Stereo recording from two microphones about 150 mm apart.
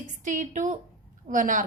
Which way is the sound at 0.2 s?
55° right (ahead or behind).